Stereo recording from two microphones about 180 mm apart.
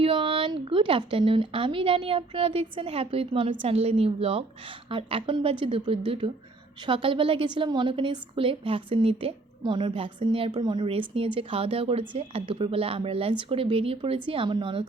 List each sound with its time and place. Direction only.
0.0 s a woman's voice: 30° right (ahead or behind)